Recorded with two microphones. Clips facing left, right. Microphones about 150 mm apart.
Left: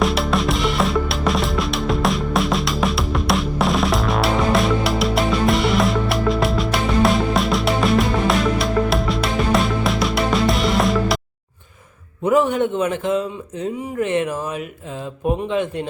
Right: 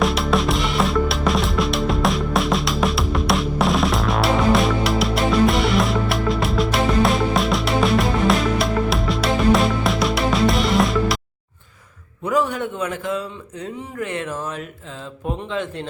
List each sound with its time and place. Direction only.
0.0 s music: centre (ahead or behind)
12.2 s a man's voice: 20° left (ahead or behind)